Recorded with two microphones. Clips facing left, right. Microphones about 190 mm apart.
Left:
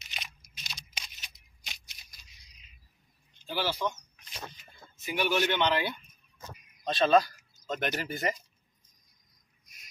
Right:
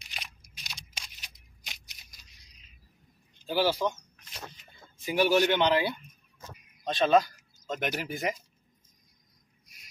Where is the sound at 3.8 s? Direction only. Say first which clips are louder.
Right 3 dB; 30° right (ahead or behind).